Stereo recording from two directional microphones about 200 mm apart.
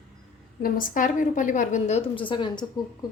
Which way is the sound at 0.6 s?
45° left (ahead or behind).